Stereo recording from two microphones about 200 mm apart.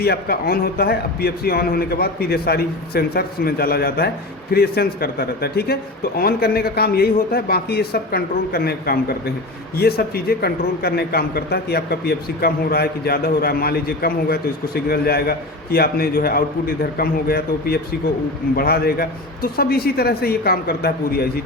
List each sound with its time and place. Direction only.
0.0 s a man's voice: 50° left (ahead or behind)